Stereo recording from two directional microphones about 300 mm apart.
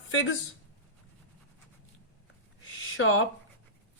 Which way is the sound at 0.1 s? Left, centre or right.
Left.